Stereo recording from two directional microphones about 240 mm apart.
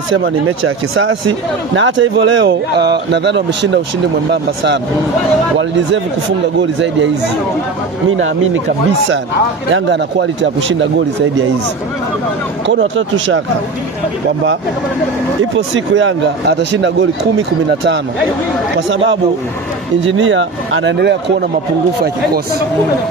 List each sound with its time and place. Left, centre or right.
0.5 s speech: right
8.2 s speech: right
12.6 s speech: right
15.5 s speech: right
18.8 s speech: right